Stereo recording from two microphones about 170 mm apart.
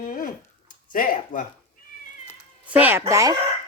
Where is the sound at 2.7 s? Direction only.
10° right (ahead or behind).